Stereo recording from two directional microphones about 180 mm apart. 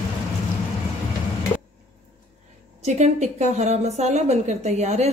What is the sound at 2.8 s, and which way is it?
A woman's voice, 40° right (ahead or behind).